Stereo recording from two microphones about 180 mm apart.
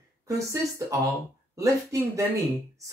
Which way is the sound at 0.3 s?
20° right (ahead or behind).